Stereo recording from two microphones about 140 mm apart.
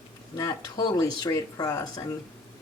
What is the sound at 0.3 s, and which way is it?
Speech, 25° left (ahead or behind).